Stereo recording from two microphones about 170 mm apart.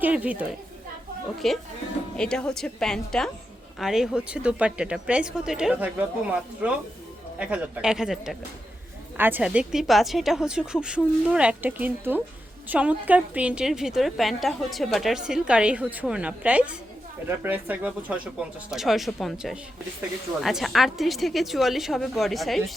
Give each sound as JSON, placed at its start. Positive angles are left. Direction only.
{"t": 0.0, "sound": "a woman's voice", "side_deg": -10}
{"t": 1.4, "sound": "a woman's voice", "side_deg": 0}